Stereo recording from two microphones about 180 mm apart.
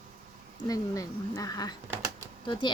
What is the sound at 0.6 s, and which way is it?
Speech, 20° left (ahead or behind).